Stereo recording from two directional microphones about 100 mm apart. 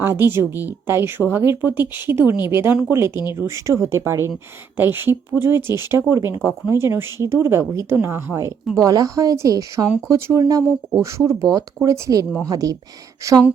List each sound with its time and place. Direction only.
0.0 s speech: 20° right (ahead or behind)
8.7 s speech: 35° right (ahead or behind)